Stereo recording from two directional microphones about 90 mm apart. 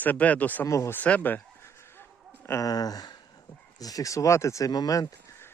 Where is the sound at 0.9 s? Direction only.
15° left (ahead or behind).